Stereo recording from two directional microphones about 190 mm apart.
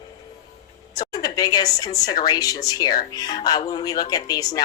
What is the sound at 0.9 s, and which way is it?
A woman's voice, 20° left (ahead or behind).